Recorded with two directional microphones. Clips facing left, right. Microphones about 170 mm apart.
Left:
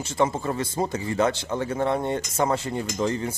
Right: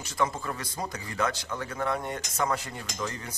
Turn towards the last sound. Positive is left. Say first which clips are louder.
# left 10 dB
turn(degrees=25)  # may be behind; listen again after turning